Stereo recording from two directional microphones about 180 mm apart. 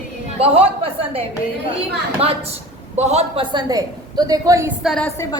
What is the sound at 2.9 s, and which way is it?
Speech, 35° right (ahead or behind).